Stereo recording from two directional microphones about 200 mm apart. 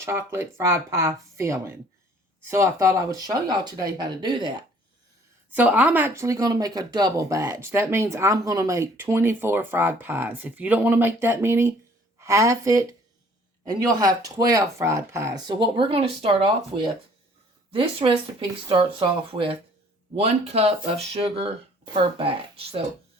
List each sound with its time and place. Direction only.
0.0 s speech: 10° right (ahead or behind)
5.5 s speech: 10° right (ahead or behind); by 22.9 s 30° right (ahead or behind)